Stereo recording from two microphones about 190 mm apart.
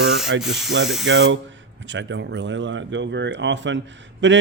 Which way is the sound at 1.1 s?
70° right (ahead or behind).